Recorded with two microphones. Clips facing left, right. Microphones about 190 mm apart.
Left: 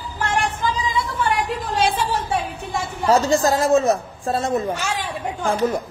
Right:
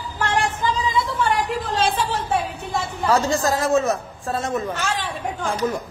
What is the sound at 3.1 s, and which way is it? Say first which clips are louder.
A woman's voice: left 3 dB; 25° left (ahead or behind).